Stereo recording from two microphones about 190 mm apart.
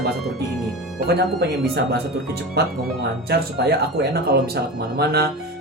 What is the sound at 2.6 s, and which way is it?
Speech, 60° right (ahead or behind).